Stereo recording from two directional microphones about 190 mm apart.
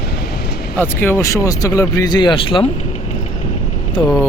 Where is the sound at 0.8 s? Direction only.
10° left (ahead or behind).